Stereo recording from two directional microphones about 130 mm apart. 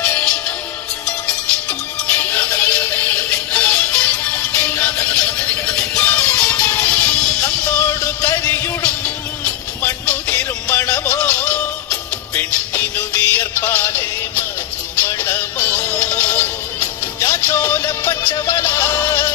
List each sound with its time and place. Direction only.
0.0 s music: 10° left (ahead or behind)
2.0 s synthetic singing: 15° left (ahead or behind)
5.2 s music: 10° left (ahead or behind)